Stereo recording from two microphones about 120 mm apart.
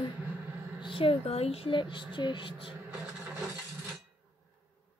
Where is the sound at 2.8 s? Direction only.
10° right (ahead or behind).